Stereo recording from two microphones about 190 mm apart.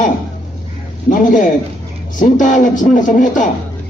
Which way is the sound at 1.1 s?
45° left (ahead or behind).